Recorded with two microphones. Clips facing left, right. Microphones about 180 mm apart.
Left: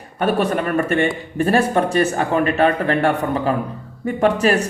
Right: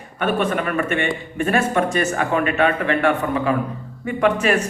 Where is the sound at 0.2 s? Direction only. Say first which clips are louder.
Left 2 dB; 40° left (ahead or behind).